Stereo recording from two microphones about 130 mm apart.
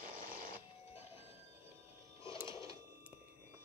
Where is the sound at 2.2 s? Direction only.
40° left (ahead or behind).